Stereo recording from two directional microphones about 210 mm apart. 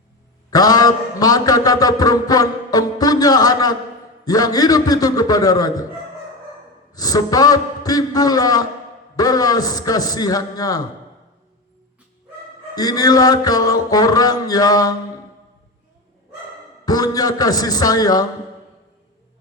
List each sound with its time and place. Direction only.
0.5 s a man's voice: 20° left (ahead or behind)
6.9 s a man's voice: 20° left (ahead or behind)
12.7 s a man's voice: 20° left (ahead or behind)
16.8 s a man's voice: 20° left (ahead or behind)